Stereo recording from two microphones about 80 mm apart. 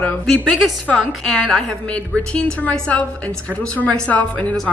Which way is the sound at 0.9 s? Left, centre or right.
Centre.